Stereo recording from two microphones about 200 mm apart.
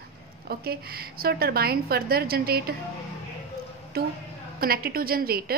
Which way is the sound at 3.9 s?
50° right (ahead or behind).